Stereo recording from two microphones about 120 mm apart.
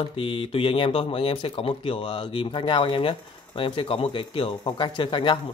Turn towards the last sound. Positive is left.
turn(degrees=40)  # may be behind; listen again after turning